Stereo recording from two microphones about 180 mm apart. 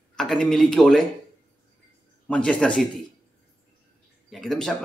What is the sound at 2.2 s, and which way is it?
Speech, 5° left (ahead or behind).